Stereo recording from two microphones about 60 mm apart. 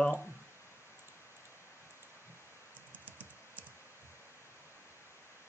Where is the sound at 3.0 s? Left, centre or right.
Right.